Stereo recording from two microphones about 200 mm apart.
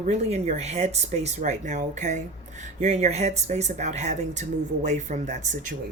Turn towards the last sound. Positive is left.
turn(degrees=-40)  # may be behind; listen again after turning